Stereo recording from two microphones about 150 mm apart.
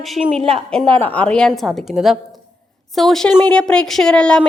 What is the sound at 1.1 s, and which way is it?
A woman's voice, 10° left (ahead or behind).